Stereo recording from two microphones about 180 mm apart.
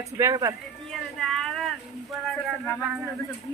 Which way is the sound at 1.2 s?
Centre (ahead or behind).